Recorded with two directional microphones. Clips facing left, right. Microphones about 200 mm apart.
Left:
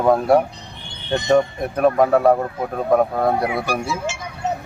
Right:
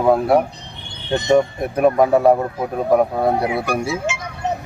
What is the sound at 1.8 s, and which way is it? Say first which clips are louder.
Speech: right 1 dB; 15° right (ahead or behind).